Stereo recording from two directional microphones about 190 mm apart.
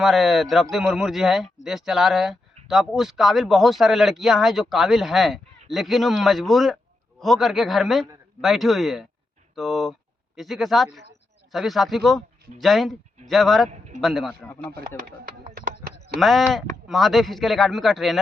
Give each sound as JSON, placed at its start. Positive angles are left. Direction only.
{"t": 0.0, "sound": "speech", "side_deg": 0}
{"t": 13.7, "sound": "speech", "side_deg": -40}
{"t": 14.0, "sound": "speech", "side_deg": 0}
{"t": 16.1, "sound": "speech", "side_deg": 0}